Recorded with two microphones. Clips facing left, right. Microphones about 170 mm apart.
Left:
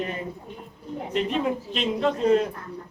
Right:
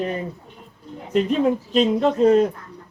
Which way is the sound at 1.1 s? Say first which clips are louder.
Right 7 dB; 40° right (ahead or behind).